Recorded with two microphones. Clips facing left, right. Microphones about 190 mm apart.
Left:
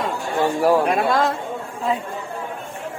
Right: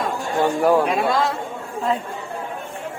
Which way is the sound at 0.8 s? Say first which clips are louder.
Left 1 dB; 55° left (ahead or behind).